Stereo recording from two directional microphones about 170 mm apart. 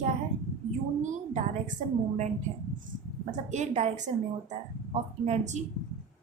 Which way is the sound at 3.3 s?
45° right (ahead or behind).